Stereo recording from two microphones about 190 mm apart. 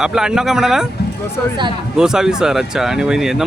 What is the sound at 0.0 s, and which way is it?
Speech, 5° right (ahead or behind).